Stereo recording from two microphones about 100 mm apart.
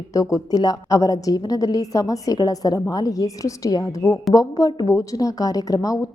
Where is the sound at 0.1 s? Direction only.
35° left (ahead or behind).